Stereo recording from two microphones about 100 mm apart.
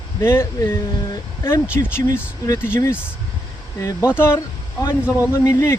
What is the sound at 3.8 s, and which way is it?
Speech, 30° left (ahead or behind).